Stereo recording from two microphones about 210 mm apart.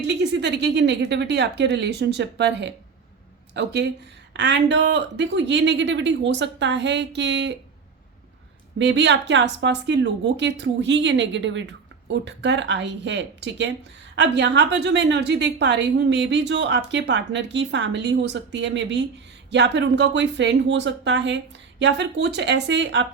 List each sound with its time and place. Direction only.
0.0 s speech: 55° right (ahead or behind)
8.8 s speech: 55° right (ahead or behind)